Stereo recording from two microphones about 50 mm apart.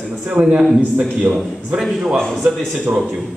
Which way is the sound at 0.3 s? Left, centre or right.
Right.